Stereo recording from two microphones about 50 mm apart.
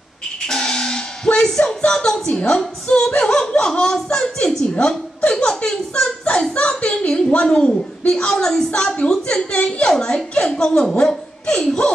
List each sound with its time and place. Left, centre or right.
0.5 s music: centre
1.8 s a woman's voice: centre
3.2 s laughter: centre
3.7 s a woman's voice: centre